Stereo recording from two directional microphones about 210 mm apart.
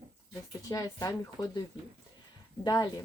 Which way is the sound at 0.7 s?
15° left (ahead or behind).